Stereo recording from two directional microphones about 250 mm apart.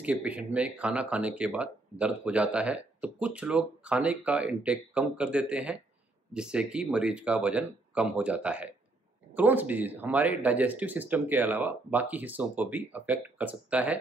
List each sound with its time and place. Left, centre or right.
0.0 s speech: centre